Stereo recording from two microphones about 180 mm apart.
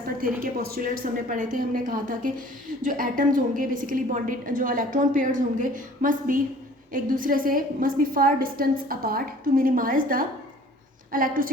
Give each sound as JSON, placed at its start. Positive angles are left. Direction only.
{"t": 0.2, "sound": "a woman's voice", "side_deg": -55}